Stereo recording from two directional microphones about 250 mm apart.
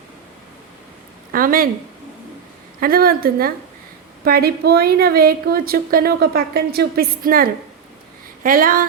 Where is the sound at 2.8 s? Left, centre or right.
Right.